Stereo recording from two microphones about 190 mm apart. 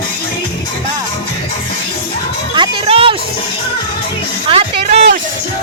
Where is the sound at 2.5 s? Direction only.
25° right (ahead or behind).